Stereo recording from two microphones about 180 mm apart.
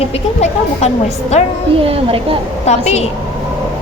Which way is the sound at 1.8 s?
30° right (ahead or behind).